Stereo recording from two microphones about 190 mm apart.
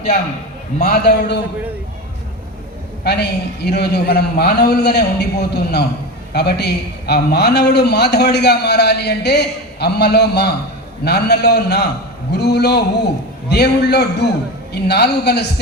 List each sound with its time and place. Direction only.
0.8 s a man's voice: 60° left (ahead or behind)
3.0 s a man's voice: 60° left (ahead or behind)